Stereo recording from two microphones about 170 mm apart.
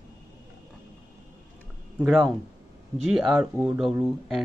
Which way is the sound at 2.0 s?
Centre (ahead or behind).